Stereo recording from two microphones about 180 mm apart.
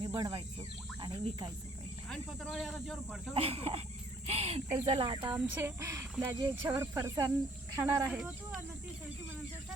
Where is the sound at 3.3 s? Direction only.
35° right (ahead or behind).